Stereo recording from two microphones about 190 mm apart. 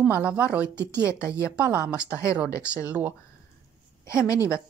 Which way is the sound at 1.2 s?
15° left (ahead or behind).